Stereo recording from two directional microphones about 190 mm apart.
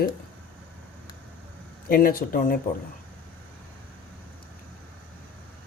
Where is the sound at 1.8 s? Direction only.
50° left (ahead or behind).